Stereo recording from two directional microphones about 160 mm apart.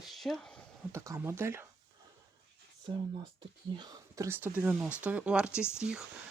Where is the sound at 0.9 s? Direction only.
15° right (ahead or behind).